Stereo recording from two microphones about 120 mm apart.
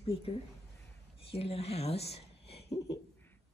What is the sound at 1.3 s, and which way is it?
Speech, 55° left (ahead or behind).